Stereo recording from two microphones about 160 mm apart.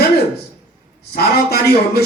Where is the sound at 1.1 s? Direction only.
75° left (ahead or behind).